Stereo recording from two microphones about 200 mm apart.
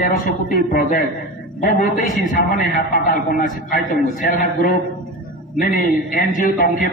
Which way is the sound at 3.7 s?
45° left (ahead or behind).